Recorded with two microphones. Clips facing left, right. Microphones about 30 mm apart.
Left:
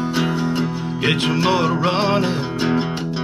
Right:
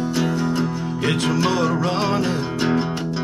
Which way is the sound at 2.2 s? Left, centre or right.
Centre.